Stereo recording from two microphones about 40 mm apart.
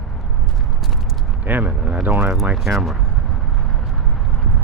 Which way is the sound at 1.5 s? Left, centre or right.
Right.